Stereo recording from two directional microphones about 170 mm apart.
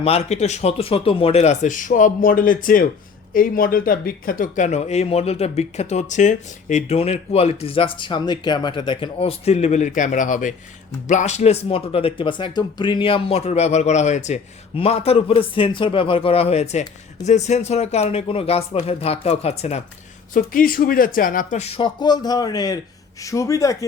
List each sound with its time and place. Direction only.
0.0 s speech: 40° left (ahead or behind)
20.3 s speech: 55° left (ahead or behind); by 23.7 s 20° left (ahead or behind)